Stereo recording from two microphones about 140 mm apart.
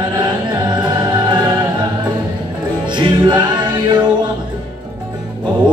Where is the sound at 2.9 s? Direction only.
35° right (ahead or behind).